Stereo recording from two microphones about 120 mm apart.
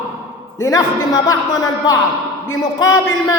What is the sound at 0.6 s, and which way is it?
Music, 30° left (ahead or behind).